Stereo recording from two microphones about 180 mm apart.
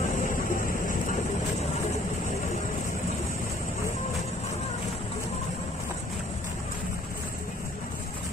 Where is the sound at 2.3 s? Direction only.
40° left (ahead or behind).